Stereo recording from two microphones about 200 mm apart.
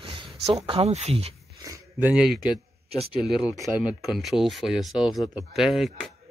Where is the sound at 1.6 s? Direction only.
10° right (ahead or behind).